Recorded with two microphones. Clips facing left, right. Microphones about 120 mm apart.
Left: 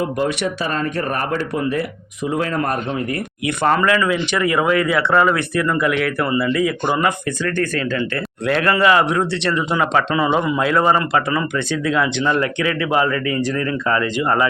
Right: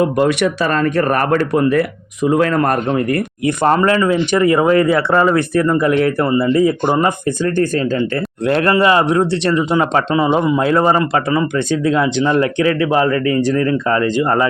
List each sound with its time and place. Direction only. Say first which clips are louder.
0.0 s speech: right 6 dB; 70° right (ahead or behind)
3.4 s speech: right 3 dB; 35° right (ahead or behind)